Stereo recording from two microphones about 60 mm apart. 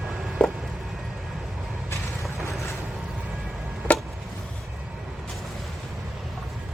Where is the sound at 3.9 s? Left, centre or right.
Left.